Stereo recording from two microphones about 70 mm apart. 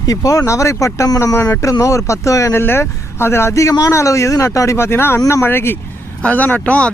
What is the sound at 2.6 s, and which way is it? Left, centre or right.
Speech, left.